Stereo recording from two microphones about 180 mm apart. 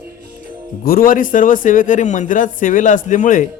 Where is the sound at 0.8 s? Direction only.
55° left (ahead or behind).